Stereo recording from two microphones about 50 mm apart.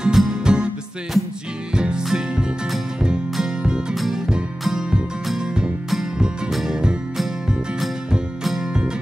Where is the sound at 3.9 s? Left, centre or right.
Centre.